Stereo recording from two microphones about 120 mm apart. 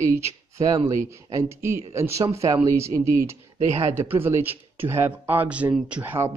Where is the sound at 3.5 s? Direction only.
65° right (ahead or behind).